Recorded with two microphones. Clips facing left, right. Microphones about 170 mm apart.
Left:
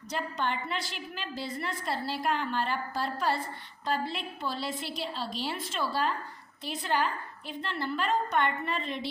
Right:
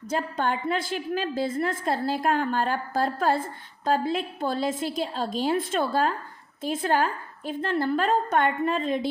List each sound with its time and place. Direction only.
0.1 s a woman's voice: 45° right (ahead or behind)